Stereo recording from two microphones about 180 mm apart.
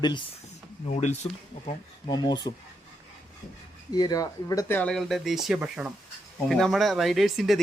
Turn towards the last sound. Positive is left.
turn(degrees=0)  # may be behind; listen again after turning